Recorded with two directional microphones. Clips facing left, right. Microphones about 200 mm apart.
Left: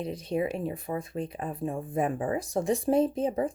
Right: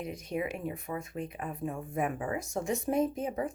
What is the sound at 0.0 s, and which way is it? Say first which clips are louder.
Speech: left 5 dB; 30° left (ahead or behind).